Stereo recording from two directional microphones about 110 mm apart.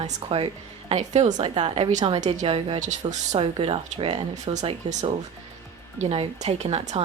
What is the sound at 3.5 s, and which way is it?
Speech, 60° right (ahead or behind).